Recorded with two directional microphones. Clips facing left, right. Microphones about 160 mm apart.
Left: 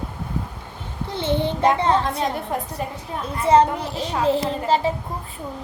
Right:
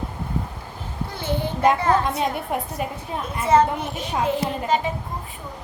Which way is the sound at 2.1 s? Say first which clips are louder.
Even; 20° right (ahead or behind).